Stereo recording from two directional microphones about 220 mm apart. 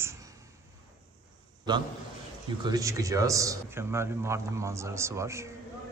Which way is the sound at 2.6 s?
15° right (ahead or behind).